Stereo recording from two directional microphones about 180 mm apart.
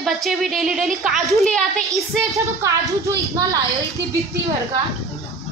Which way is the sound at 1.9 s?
15° right (ahead or behind).